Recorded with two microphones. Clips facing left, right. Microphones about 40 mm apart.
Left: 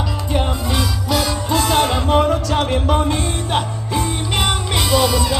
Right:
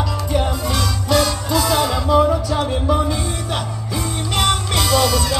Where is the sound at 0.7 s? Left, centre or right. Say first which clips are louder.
Right 3 dB; centre.